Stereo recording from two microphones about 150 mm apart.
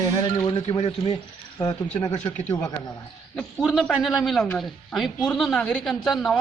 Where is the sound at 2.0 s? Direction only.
25° left (ahead or behind).